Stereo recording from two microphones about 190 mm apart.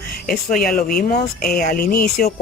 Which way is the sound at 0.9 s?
50° left (ahead or behind).